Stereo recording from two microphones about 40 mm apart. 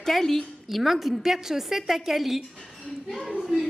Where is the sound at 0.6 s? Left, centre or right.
Centre.